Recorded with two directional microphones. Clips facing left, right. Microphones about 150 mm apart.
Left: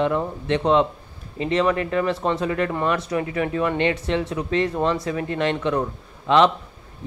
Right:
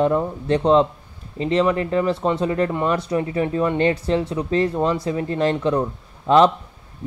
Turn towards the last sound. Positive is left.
turn(degrees=-40)  # may be behind; listen again after turning